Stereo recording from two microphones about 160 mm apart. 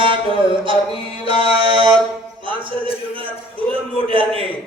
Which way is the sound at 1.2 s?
30° right (ahead or behind).